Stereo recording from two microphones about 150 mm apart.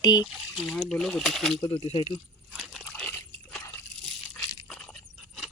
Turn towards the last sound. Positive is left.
turn(degrees=0)  # may be behind; listen again after turning